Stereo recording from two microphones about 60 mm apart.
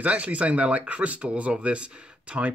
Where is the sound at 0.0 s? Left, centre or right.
Right.